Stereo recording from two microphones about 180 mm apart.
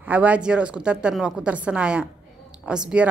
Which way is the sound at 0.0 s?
10° right (ahead or behind).